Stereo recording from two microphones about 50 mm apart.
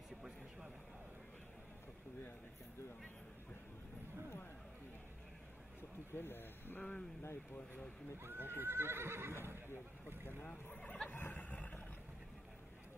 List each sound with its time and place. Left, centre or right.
6.1 s speech: left
6.8 s speech: centre
8.2 s speech: right
10.7 s speech: left
11.1 s a sound: left